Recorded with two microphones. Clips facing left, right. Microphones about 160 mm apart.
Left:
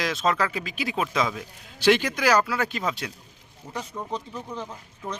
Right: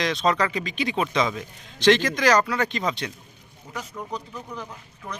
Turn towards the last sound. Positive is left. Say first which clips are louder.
# left 1 dB
turn(degrees=30)  # may be behind; listen again after turning